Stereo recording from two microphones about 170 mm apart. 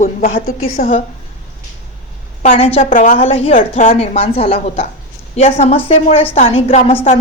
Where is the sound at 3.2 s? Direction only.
35° left (ahead or behind).